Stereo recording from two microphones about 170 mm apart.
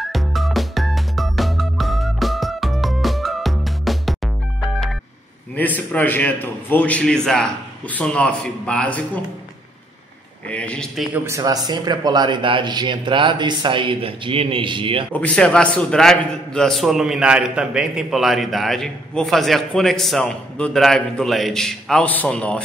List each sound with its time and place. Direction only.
0.0 s music: centre (ahead or behind)
5.9 s a man's voice: 10° left (ahead or behind)
10.5 s a man's voice: 5° left (ahead or behind)
11.2 s a man's voice: 20° right (ahead or behind)
15.1 s a man's voice: 5° left (ahead or behind)